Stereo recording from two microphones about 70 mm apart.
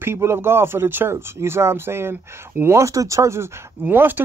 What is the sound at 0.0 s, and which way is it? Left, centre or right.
Speech, right.